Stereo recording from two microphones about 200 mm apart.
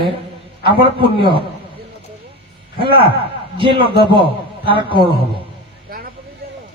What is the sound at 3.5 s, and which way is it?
Speech, 25° right (ahead or behind).